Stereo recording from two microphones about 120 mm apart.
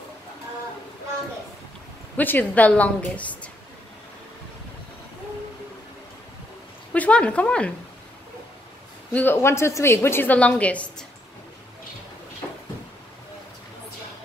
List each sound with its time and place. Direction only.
2.1 s a woman's voice: 15° left (ahead or behind)
6.9 s speech: 10° left (ahead or behind)
9.1 s a woman's voice: 15° left (ahead or behind)